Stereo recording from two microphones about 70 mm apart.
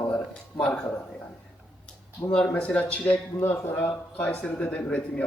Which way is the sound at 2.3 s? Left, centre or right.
Centre.